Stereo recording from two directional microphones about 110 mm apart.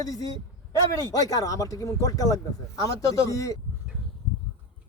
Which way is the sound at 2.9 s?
60° right (ahead or behind).